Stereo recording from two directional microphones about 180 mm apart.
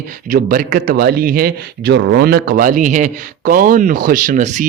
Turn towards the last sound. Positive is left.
turn(degrees=-45)  # may be behind; listen again after turning